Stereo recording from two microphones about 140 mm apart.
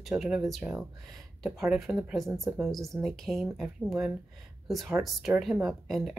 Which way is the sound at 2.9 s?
Centre (ahead or behind).